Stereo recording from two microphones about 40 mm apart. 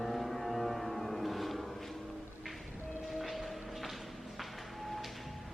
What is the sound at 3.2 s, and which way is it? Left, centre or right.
Music, centre.